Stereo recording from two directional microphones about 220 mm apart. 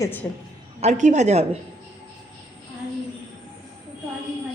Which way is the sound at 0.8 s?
30° right (ahead or behind).